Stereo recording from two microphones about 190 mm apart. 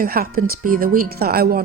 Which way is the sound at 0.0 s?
50° right (ahead or behind).